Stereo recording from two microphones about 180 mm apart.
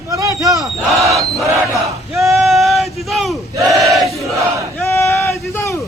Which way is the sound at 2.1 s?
Centre (ahead or behind).